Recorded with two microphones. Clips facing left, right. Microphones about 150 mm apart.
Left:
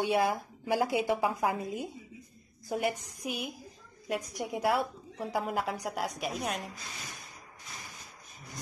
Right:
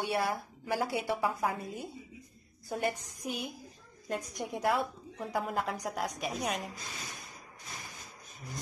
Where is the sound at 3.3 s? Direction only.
5° left (ahead or behind).